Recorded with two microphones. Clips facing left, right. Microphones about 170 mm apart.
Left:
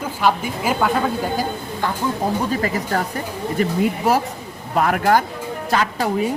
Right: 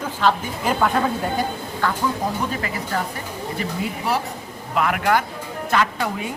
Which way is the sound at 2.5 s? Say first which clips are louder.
Left 5 dB; 40° left (ahead or behind).